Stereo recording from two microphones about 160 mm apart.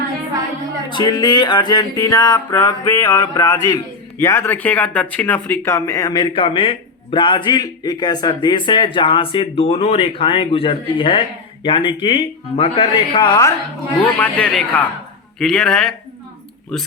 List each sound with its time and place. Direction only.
0.9 s speech: 30° left (ahead or behind)
14.0 s a man's voice: 10° left (ahead or behind)